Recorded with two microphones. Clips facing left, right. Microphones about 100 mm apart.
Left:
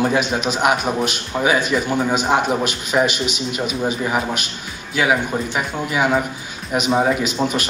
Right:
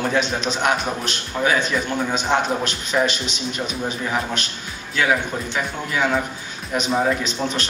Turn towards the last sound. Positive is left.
turn(degrees=20)  # may be behind; listen again after turning